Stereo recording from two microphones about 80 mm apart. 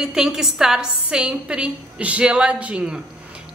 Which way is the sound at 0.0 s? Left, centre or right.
Centre.